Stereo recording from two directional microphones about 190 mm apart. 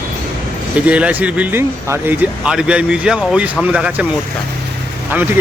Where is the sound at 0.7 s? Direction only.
5° right (ahead or behind).